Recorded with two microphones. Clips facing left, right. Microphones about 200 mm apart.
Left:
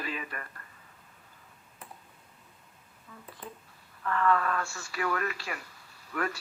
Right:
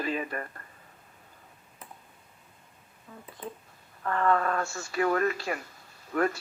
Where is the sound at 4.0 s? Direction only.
35° right (ahead or behind).